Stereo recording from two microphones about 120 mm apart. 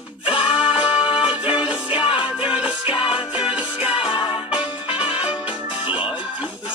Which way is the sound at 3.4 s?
10° right (ahead or behind).